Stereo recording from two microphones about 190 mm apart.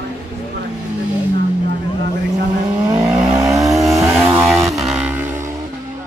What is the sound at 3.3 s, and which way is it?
Vehicle, 20° right (ahead or behind).